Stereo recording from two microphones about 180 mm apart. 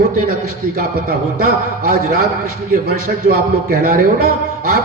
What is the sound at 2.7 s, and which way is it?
A man's voice, 50° right (ahead or behind).